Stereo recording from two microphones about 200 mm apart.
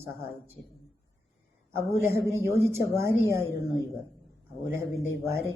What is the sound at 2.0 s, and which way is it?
A man's voice, 15° right (ahead or behind).